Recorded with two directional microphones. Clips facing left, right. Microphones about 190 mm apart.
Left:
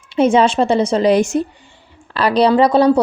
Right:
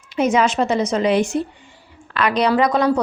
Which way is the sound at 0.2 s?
30° left (ahead or behind).